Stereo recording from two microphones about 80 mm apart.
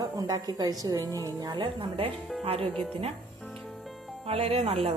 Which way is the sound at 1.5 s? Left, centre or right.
Right.